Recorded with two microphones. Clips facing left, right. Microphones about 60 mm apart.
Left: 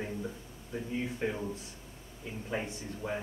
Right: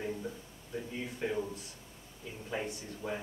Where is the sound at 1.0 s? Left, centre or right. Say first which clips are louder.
Left 1 dB; centre.